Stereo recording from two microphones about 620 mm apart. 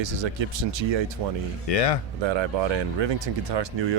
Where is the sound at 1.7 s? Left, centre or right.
Left.